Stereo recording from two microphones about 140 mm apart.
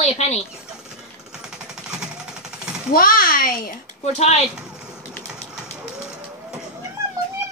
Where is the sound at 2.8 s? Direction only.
90° left.